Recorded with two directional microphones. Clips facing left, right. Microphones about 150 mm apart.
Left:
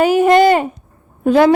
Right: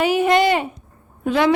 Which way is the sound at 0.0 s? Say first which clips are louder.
Left 6 dB; 45° left (ahead or behind).